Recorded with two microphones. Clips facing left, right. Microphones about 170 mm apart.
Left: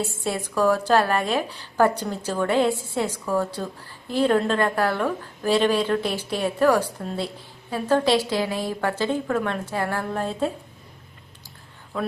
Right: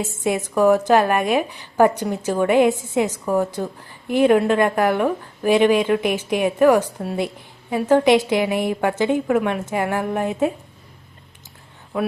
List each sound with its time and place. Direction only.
0.5 s a woman's voice: 15° right (ahead or behind)
11.9 s a woman's voice: 10° right (ahead or behind)